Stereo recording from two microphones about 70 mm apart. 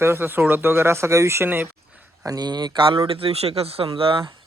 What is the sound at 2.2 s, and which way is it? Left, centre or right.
Speech, right.